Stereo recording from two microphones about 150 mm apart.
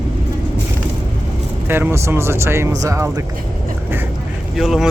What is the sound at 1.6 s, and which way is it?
Speech, 15° right (ahead or behind).